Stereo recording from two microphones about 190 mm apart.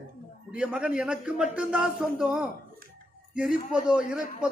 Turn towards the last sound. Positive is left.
turn(degrees=-5)  # may be behind; listen again after turning